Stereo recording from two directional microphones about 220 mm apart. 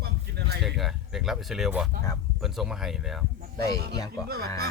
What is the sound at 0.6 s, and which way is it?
Speech, centre (ahead or behind).